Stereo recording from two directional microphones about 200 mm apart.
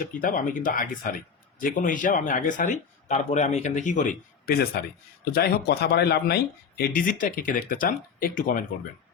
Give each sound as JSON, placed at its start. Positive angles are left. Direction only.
{"t": 0.0, "sound": "speech", "side_deg": 40}